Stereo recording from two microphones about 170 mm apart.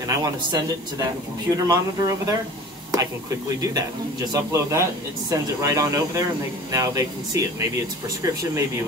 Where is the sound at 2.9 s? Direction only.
20° right (ahead or behind).